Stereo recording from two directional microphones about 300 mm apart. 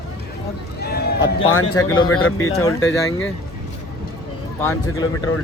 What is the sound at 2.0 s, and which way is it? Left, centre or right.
Speech, left.